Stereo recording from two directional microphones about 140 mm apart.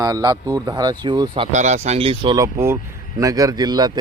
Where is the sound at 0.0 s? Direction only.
25° right (ahead or behind).